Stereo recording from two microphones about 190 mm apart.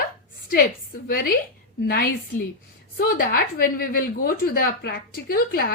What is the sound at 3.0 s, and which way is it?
A woman's voice, 50° left (ahead or behind).